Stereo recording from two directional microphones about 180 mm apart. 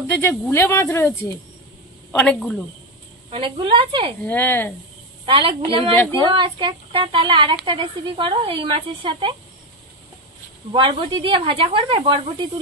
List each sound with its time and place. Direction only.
0.0 s speech: 10° left (ahead or behind)
2.1 s speech: 5° left (ahead or behind)
3.3 s speech: 30° right (ahead or behind)
4.3 s speech: 10° left (ahead or behind)
5.2 s speech: 30° right (ahead or behind)
5.9 s speech: 10° left (ahead or behind)
6.3 s speech: 25° right (ahead or behind)
10.7 s speech: 25° right (ahead or behind)